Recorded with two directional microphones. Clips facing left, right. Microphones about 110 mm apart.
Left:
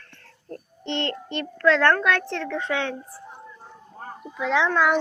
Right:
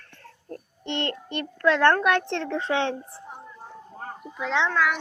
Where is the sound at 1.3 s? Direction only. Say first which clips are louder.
Left 2 dB; 15° right (ahead or behind); by 2.9 s 30° right (ahead or behind).